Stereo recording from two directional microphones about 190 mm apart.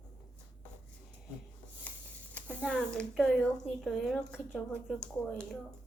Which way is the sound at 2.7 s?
5° left (ahead or behind).